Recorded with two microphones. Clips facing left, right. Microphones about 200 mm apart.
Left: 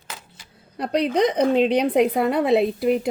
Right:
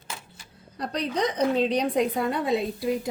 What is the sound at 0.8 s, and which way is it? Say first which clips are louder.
A woman's voice: left 7 dB; 60° left (ahead or behind).